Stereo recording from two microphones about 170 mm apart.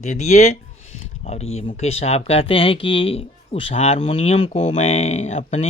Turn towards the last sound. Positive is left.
turn(degrees=40)  # may be behind; listen again after turning